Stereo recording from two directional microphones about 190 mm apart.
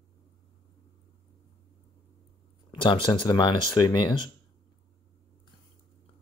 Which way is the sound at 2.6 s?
25° left (ahead or behind).